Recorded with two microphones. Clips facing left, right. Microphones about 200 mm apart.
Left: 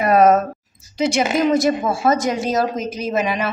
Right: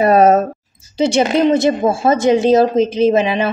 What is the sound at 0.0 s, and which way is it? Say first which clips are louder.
A woman's voice: right 3 dB; 30° right (ahead or behind).